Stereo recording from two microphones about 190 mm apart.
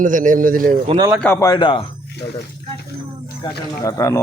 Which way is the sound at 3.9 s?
15° left (ahead or behind).